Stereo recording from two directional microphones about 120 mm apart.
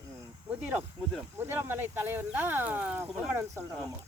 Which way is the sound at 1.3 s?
20° right (ahead or behind).